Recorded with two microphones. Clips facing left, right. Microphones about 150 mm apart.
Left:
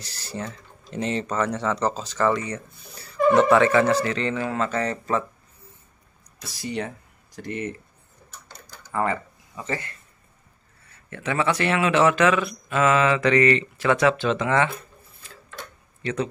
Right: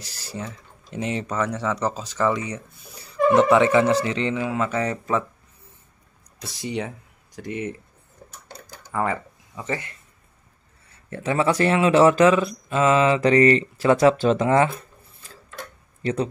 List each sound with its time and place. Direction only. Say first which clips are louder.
0.0 s speech: left 1 dB; 5° right (ahead or behind)
6.5 s speech: right 2 dB; 20° right (ahead or behind)
7.3 s speech: right 1 dB; 10° right (ahead or behind)
8.9 s a sound: even; 5° right (ahead or behind)
9.7 s speech: right 1 dB; 20° right (ahead or behind)
11.1 s speech: right 3 dB; 35° right (ahead or behind)
16.0 s speech: right 3 dB; 35° right (ahead or behind)